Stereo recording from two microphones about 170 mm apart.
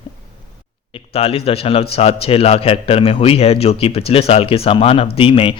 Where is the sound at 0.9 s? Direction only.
35° left (ahead or behind).